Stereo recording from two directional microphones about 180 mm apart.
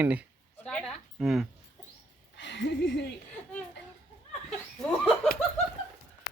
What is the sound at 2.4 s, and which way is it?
Speech, 80° left.